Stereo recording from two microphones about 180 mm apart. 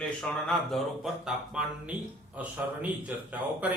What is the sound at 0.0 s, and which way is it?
Speech, 5° left (ahead or behind).